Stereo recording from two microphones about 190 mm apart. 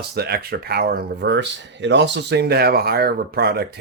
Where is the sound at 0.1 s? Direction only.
55° right (ahead or behind).